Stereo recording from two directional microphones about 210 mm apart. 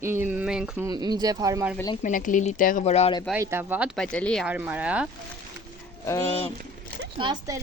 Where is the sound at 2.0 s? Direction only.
40° left (ahead or behind).